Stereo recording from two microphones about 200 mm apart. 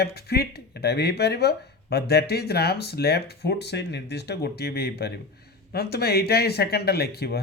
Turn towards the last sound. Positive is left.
turn(degrees=55)  # may be behind; listen again after turning